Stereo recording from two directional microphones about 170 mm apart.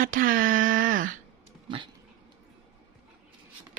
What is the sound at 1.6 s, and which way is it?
Dog, 30° right (ahead or behind).